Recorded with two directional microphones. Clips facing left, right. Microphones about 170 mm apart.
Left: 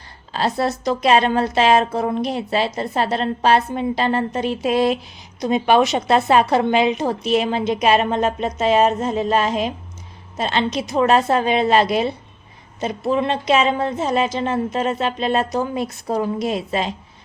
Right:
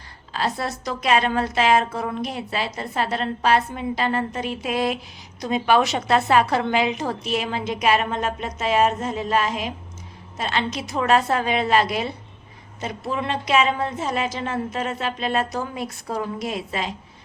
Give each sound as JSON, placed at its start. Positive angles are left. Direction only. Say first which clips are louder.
{"t": 0.3, "sound": "a woman's voice", "louder": "left 5 dB", "side_deg": 30}